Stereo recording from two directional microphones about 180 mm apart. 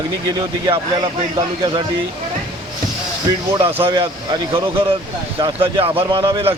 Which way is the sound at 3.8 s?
25° right (ahead or behind).